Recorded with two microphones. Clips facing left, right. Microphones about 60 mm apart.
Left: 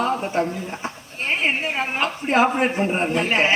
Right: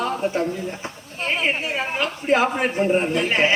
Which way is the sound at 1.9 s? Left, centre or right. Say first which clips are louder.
Even; left.